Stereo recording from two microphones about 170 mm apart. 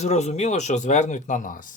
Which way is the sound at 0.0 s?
40° left (ahead or behind).